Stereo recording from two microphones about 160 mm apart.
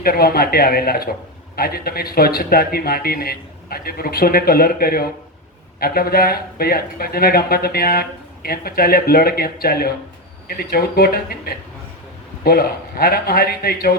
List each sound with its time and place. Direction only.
0.0 s speech: 70° left (ahead or behind)